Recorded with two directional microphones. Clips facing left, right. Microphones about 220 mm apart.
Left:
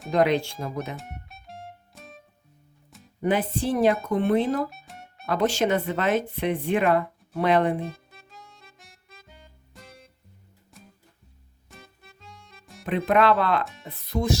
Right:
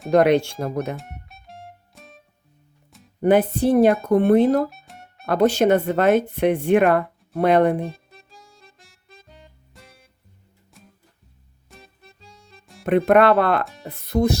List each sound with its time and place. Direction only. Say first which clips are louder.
0.1 s speech: right 6 dB; 70° right (ahead or behind)
0.9 s music: right 2 dB; centre (ahead or behind)
3.2 s speech: right 7 dB; 60° right (ahead or behind)
4.7 s music: even; centre (ahead or behind)
5.2 s speech: right 6 dB; 60° right (ahead or behind)
9.4 s music: even; centre (ahead or behind)
12.0 s music: right 1 dB; 35° right (ahead or behind)
12.8 s speech: right 6 dB; 55° right (ahead or behind)